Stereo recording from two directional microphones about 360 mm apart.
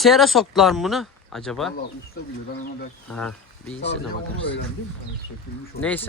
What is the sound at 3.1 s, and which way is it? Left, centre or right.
Speech, centre.